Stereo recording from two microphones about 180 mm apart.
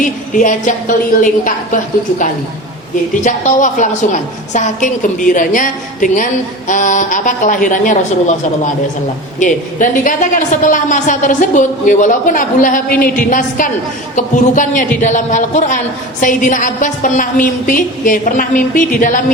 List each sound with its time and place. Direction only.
0.0 s a woman's voice: 45° left (ahead or behind)